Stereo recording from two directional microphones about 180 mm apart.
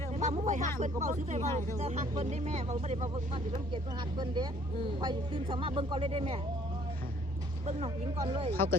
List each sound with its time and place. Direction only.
0.2 s a sound: 45° right (ahead or behind)
0.8 s speech: 40° right (ahead or behind)
4.2 s speech: 25° right (ahead or behind)
8.2 s speech: 30° right (ahead or behind)